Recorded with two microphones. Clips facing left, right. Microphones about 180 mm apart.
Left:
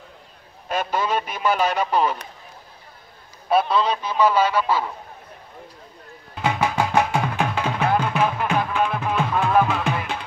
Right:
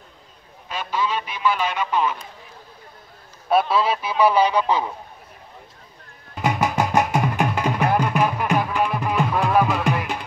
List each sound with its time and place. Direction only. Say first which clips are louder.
0.7 s speech: left 2 dB; 50° left (ahead or behind)
3.4 s a man's voice: even; centre (ahead or behind); by 4.9 s 20° right (ahead or behind)
6.3 s music: right 1 dB; centre (ahead or behind)